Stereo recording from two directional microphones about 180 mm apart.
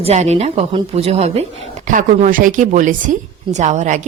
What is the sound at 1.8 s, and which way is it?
A woman's voice, 45° right (ahead or behind).